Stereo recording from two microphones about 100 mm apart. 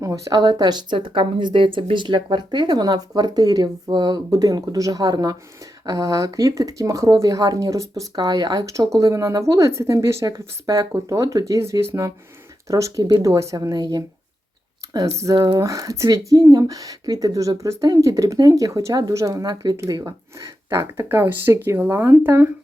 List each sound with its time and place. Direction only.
0.0 s a woman's voice: 40° right (ahead or behind); by 22.4 s 20° right (ahead or behind)